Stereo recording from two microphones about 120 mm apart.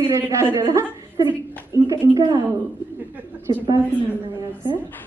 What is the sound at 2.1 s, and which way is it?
Speech, 40° right (ahead or behind).